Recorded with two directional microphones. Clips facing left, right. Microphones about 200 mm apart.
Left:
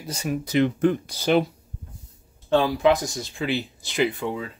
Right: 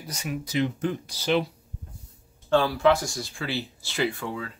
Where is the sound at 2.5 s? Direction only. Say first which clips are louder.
Left 2 dB; 15° left (ahead or behind).